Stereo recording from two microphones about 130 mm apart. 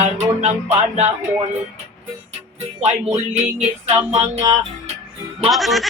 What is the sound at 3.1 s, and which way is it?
Music, 55° right (ahead or behind).